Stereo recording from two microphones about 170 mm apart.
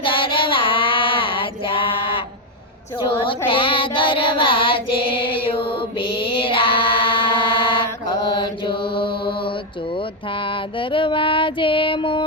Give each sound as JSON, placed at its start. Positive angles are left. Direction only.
{"t": 0.0, "sound": "child singing", "side_deg": 30}
{"t": 9.9, "sound": "female singing", "side_deg": 30}